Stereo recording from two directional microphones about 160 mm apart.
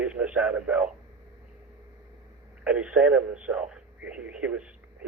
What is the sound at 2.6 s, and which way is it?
A man's voice, 5° right (ahead or behind).